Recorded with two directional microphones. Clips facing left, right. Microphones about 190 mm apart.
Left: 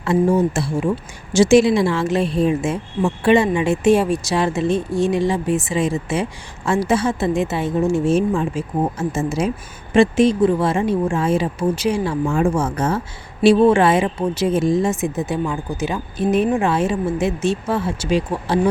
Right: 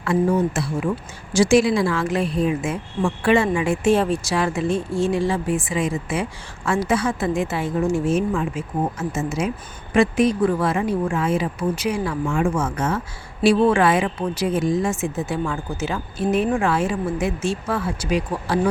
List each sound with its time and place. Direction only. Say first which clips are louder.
0.0 s a woman's voice: left 3 dB; 25° left (ahead or behind)
13.4 s a woman's voice: left 4 dB; 25° left (ahead or behind)